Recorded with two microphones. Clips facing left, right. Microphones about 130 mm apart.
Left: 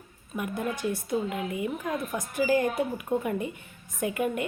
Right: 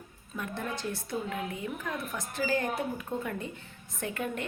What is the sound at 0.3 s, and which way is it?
A woman's voice, 15° left (ahead or behind).